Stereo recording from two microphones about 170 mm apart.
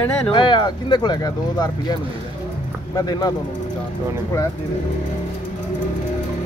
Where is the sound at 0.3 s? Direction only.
30° left (ahead or behind).